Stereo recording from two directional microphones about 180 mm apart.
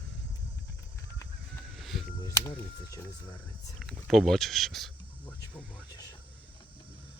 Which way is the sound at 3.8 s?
Centre (ahead or behind).